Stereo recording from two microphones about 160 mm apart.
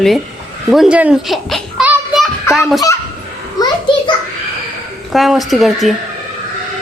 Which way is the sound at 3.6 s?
30° left (ahead or behind).